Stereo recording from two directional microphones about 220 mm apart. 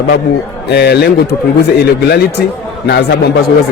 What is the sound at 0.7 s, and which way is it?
Speech, 50° left (ahead or behind).